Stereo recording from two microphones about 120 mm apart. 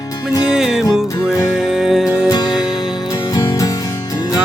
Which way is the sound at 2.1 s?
30° left (ahead or behind).